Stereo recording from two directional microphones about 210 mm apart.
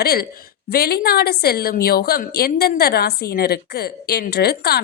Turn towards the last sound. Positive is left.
turn(degrees=50)  # may be behind; listen again after turning